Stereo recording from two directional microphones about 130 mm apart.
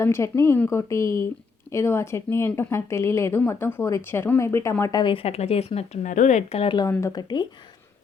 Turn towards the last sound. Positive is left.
turn(degrees=35)  # may be behind; listen again after turning